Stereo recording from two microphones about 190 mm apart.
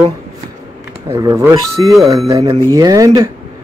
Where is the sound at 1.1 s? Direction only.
15° right (ahead or behind).